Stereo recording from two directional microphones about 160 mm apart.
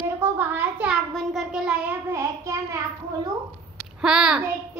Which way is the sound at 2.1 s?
20° right (ahead or behind).